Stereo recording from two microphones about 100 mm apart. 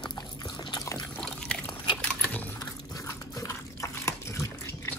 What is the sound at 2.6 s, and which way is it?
Dog, 35° left (ahead or behind).